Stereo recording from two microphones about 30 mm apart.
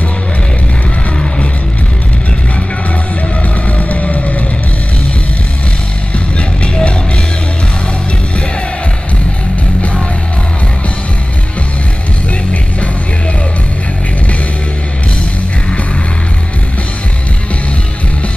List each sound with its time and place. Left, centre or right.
3.7 s vehicle: left
6.1 s music: left